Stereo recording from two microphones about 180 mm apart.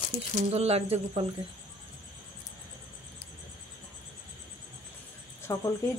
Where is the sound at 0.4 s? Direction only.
35° right (ahead or behind).